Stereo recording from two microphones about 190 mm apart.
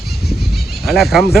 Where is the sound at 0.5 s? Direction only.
Centre (ahead or behind).